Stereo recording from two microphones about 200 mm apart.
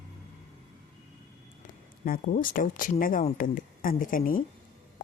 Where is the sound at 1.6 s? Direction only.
45° left (ahead or behind).